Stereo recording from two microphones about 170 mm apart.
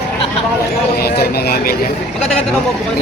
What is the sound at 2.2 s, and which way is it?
Speech, centre (ahead or behind).